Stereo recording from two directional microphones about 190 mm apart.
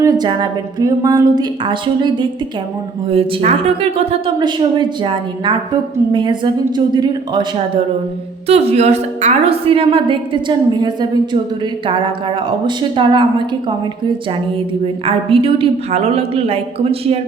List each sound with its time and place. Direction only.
0.0 s a woman's voice: 20° right (ahead or behind)
8.4 s a woman's voice: 35° right (ahead or behind)
12.5 s a woman's voice: 25° right (ahead or behind)
15.0 s a woman's voice: 30° right (ahead or behind)